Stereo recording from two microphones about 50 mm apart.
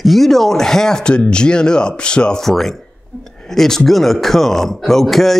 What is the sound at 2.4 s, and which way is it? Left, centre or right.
A man's voice, centre.